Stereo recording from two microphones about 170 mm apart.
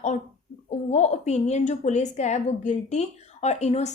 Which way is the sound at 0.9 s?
40° left (ahead or behind).